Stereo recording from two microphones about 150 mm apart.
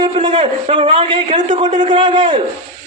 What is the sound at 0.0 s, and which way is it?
A man's voice, 35° right (ahead or behind).